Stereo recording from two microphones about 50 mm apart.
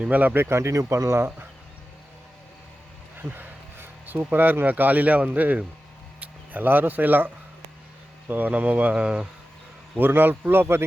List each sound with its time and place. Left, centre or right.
0.0 s speech: right
0.6 s speech: right
3.2 s speech: right
8.3 s speech: right
10.0 s speech: right